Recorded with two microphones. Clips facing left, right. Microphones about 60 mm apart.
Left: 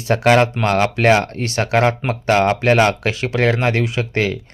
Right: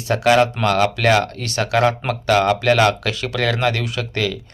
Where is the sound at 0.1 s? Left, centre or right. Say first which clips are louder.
Left 1 dB; left.